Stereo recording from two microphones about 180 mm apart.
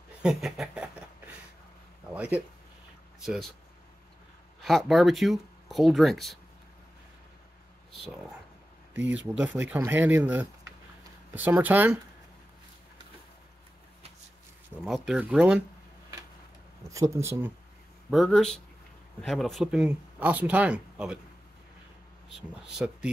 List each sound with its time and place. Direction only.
0.2 s a sound: centre (ahead or behind)
2.1 s speech: 5° right (ahead or behind)
4.6 s speech: centre (ahead or behind)
9.0 s speech: 90° right
9.4 s speech: 10° right (ahead or behind)
14.9 s speech: 5° right (ahead or behind)
16.9 s speech: 15° right (ahead or behind)
18.1 s speech: centre (ahead or behind)
22.3 s speech: centre (ahead or behind)